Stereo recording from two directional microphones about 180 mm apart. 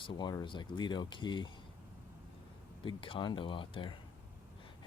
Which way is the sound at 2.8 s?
30° left (ahead or behind).